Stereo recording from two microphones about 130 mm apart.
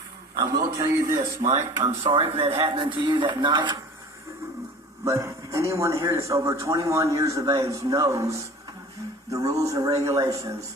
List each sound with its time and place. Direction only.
0.3 s speech: 25° right (ahead or behind)
2.0 s speech: 45° right (ahead or behind)
5.0 s speech: 25° right (ahead or behind)